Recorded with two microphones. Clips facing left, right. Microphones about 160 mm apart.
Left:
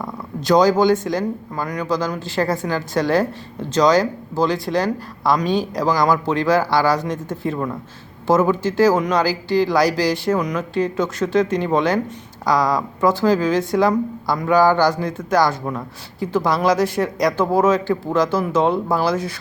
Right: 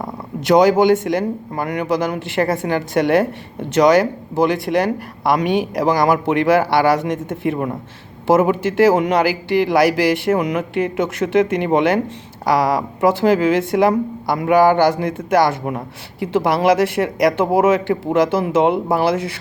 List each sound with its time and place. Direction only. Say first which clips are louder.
0.0 s a woman's voice: right 2 dB; 25° right (ahead or behind)